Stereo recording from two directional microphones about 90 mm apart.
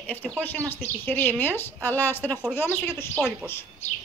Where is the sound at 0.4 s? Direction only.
20° left (ahead or behind).